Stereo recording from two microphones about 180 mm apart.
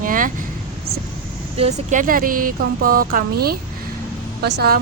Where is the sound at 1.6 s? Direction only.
40° right (ahead or behind).